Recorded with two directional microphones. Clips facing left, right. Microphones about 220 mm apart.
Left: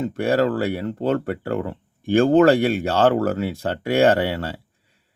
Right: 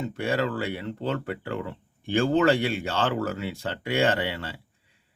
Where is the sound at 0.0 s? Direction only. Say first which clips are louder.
Left 7 dB; 45° left (ahead or behind).